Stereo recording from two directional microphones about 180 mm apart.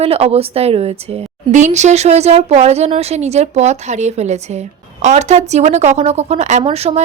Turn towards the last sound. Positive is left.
turn(degrees=-35)  # may be behind; listen again after turning